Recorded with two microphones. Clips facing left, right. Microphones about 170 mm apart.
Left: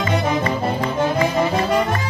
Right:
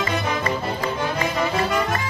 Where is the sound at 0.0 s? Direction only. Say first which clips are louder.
Left 4 dB; 30° left (ahead or behind).